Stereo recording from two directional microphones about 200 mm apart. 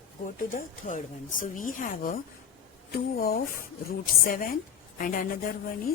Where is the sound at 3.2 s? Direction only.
50° left (ahead or behind).